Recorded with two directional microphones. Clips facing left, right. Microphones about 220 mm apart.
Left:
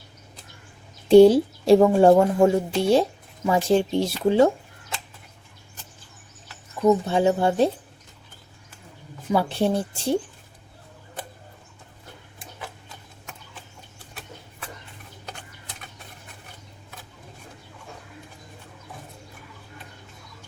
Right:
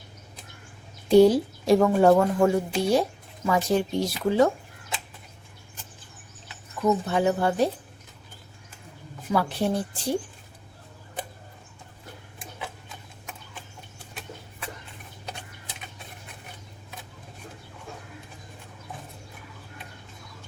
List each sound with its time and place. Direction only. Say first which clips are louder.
1.1 s a woman's voice: left 4 dB; 30° left (ahead or behind)
6.8 s a woman's voice: left 4 dB; 25° left (ahead or behind)
9.3 s a woman's voice: left 3 dB; 25° left (ahead or behind)